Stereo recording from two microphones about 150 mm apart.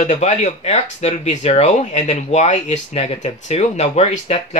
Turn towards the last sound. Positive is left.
turn(degrees=50)  # may be behind; listen again after turning